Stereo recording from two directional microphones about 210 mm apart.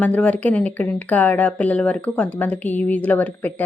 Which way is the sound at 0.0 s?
5° left (ahead or behind).